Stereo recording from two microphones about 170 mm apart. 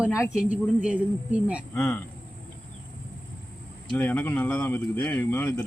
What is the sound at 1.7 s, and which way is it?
Speech, 5° left (ahead or behind).